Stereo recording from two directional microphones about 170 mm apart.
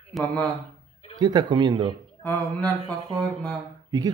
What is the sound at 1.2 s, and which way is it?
Speech, 25° right (ahead or behind).